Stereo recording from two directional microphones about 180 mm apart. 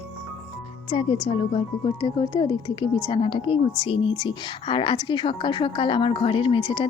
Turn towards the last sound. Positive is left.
turn(degrees=30)  # may be behind; listen again after turning